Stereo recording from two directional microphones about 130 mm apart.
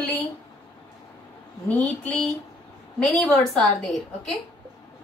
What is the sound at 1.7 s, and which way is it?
A woman's voice, 5° left (ahead or behind).